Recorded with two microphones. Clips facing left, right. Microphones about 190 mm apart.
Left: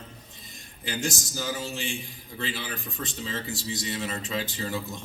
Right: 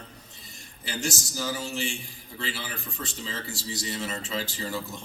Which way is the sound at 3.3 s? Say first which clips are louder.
Left 4 dB; 20° left (ahead or behind).